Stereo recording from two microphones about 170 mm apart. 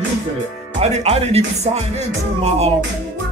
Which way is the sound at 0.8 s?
40° right (ahead or behind).